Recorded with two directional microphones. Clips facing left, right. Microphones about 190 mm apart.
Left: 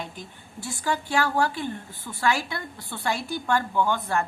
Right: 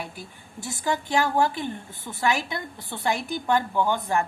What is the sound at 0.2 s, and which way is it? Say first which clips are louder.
Speech: even; 10° right (ahead or behind).